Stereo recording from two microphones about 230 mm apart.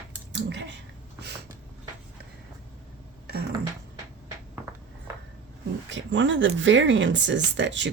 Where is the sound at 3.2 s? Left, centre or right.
Right.